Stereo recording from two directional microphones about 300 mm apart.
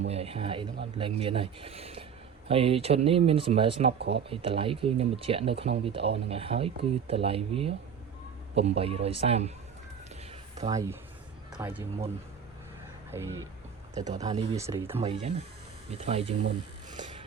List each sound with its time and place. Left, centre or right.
0.1 s speech: centre
10.7 s speech: centre
13.1 s music: centre
13.9 s speech: right
14.6 s speech: centre
14.9 s speech: centre